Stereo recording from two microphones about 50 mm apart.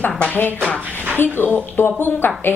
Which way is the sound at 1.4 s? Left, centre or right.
Left.